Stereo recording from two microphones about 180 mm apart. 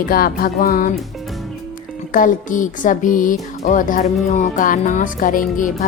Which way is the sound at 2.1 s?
45° left (ahead or behind).